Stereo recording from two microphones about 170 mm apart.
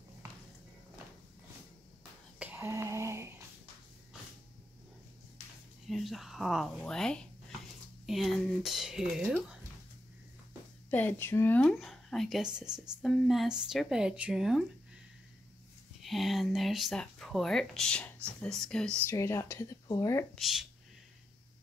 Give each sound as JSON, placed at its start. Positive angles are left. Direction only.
{"t": 2.3, "sound": "a sound", "side_deg": -10}
{"t": 5.9, "sound": "speech", "side_deg": 0}
{"t": 10.9, "sound": "a woman's voice", "side_deg": 10}
{"t": 16.0, "sound": "speech", "side_deg": 0}
{"t": 19.0, "sound": "a woman's voice", "side_deg": 15}
{"t": 20.3, "sound": "speech", "side_deg": 0}